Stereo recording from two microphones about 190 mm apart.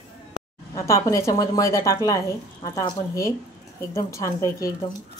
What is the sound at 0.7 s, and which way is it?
Speech, 15° left (ahead or behind).